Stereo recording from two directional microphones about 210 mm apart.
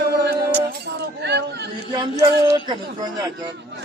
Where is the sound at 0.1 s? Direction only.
50° right (ahead or behind).